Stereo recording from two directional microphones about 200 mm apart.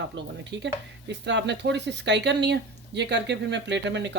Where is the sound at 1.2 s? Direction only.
60° right (ahead or behind).